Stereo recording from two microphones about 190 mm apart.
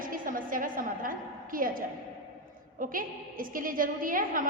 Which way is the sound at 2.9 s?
45° right (ahead or behind).